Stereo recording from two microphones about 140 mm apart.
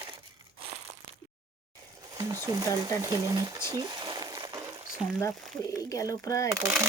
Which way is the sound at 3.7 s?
30° right (ahead or behind).